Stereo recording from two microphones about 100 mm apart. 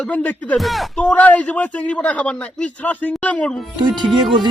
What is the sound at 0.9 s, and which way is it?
A man's voice, 15° left (ahead or behind).